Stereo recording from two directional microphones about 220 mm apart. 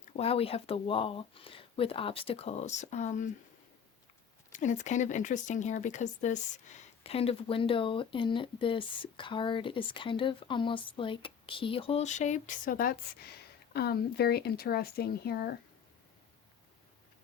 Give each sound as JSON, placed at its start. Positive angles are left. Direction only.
{"t": 0.2, "sound": "speech", "side_deg": 25}
{"t": 4.5, "sound": "speech", "side_deg": 35}